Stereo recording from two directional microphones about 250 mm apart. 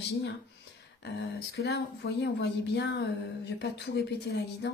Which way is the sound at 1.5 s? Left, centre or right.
Left.